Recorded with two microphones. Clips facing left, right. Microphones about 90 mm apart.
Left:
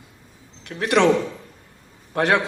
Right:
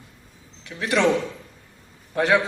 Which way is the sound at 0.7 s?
60° left (ahead or behind).